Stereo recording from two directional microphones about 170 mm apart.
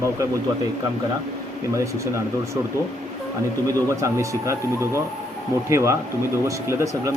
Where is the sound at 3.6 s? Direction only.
20° right (ahead or behind).